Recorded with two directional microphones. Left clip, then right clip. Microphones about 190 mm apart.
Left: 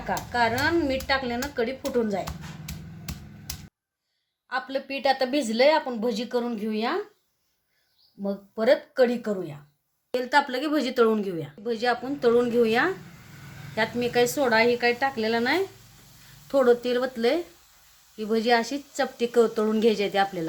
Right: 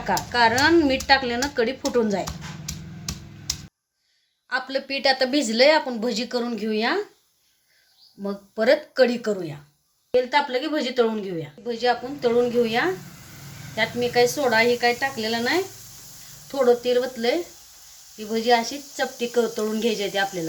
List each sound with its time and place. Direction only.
0.3 s speech: 25° right (ahead or behind)
2.2 s a sound: 10° left (ahead or behind)
4.4 s speech: 5° left (ahead or behind)
8.2 s speech: 10° left (ahead or behind)
10.2 s speech: 60° left (ahead or behind)